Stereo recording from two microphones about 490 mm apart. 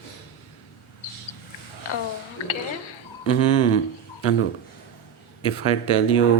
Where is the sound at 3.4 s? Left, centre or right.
Left.